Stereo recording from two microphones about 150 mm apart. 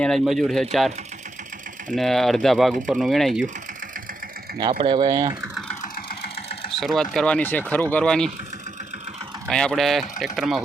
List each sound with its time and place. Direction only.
0.0 s speech: centre (ahead or behind)
2.0 s speech: centre (ahead or behind)
4.7 s speech: 35° right (ahead or behind)
6.1 s sewing machine: 90° left
6.7 s speech: centre (ahead or behind)
9.5 s speech: 5° left (ahead or behind)